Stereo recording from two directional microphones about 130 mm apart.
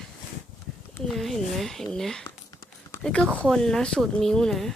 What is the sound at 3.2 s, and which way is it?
Speech, 15° right (ahead or behind).